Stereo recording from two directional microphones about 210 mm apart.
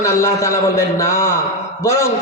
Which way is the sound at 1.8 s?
10° left (ahead or behind).